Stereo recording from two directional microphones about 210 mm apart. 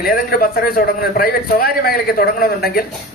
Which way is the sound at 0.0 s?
45° left (ahead or behind).